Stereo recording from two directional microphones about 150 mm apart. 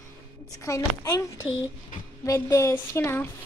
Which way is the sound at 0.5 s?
20° left (ahead or behind).